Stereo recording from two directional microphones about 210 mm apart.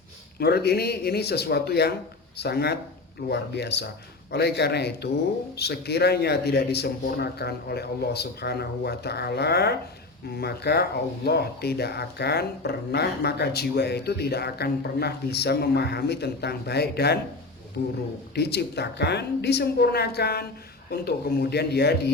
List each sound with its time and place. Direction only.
0.3 s speech: 50° left (ahead or behind)
18.3 s speech: 50° left (ahead or behind)